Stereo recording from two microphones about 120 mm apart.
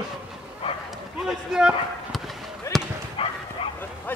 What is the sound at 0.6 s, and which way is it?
Dog, 50° left (ahead or behind).